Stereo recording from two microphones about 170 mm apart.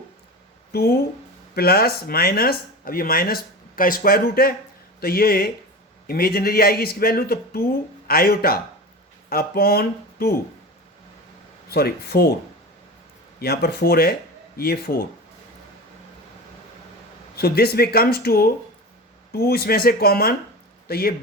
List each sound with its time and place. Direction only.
0.7 s speech: 70° left (ahead or behind)
11.7 s speech: 65° left (ahead or behind)
13.4 s speech: 65° left (ahead or behind)
17.3 s speech: 65° left (ahead or behind)